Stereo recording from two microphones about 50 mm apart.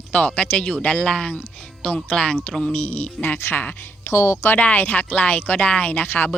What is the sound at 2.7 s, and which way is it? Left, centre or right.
Speech, left.